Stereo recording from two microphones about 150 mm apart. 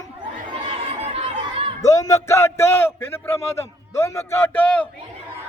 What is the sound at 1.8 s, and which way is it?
A man's voice, 20° left (ahead or behind).